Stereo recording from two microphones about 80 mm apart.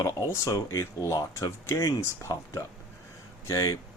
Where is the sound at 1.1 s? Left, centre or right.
Left.